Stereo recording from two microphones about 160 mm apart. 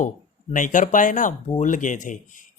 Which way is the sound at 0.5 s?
55° left (ahead or behind).